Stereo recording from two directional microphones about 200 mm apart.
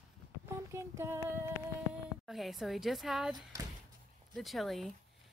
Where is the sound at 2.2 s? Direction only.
Centre (ahead or behind).